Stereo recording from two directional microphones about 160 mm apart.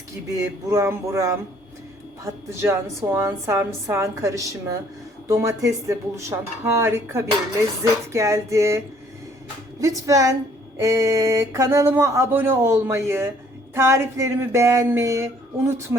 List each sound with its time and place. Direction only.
0.3 s speech: 20° right (ahead or behind)
9.8 s speech: 20° right (ahead or behind)